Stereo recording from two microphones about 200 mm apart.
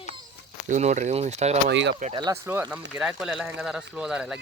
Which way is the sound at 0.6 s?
35° right (ahead or behind).